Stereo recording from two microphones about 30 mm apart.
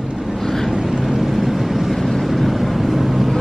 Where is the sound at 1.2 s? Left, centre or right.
Centre.